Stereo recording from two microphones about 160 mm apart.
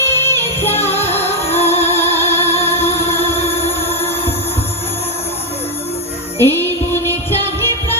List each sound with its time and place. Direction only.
0.0 s music: 15° left (ahead or behind)
1.5 s music: 40° left (ahead or behind)
2.0 s music: 15° left (ahead or behind)
6.4 s music: 15° left (ahead or behind)